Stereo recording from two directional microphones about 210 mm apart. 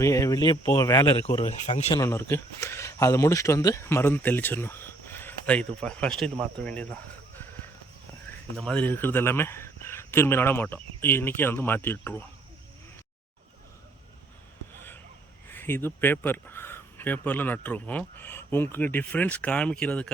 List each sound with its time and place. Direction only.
0.0 s speech: 15° left (ahead or behind)
1.5 s speech: 35° left (ahead or behind)
2.0 s speech: 10° left (ahead or behind)
8.5 s speech: 5° left (ahead or behind)
14.8 s a sound: 10° left (ahead or behind)
15.5 s speech: 10° left (ahead or behind)